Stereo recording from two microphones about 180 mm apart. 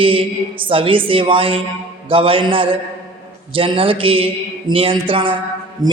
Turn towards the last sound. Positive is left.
turn(degrees=-20)  # may be behind; listen again after turning